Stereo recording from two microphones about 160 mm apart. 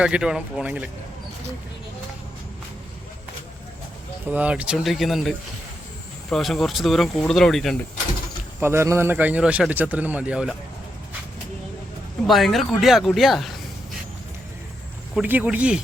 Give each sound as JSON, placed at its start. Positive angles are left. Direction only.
{"t": 0.0, "sound": "speech", "side_deg": -5}
{"t": 4.3, "sound": "speech", "side_deg": -10}
{"t": 6.3, "sound": "speech", "side_deg": 0}
{"t": 8.6, "sound": "speech", "side_deg": -15}
{"t": 12.2, "sound": "speech", "side_deg": 0}
{"t": 15.1, "sound": "speech", "side_deg": -10}